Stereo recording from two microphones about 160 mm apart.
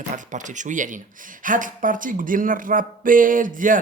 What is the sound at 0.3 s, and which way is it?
A man's voice, 50° right (ahead or behind).